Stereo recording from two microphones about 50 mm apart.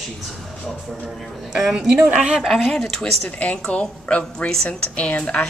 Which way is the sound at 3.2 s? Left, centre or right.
Left.